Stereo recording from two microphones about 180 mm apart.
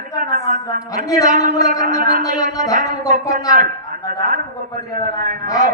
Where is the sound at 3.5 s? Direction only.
50° right (ahead or behind).